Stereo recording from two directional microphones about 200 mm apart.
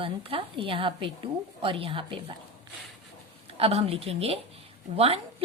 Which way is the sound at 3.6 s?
30° right (ahead or behind).